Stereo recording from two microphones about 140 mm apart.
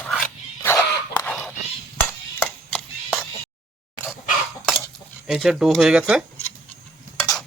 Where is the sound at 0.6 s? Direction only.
20° left (ahead or behind).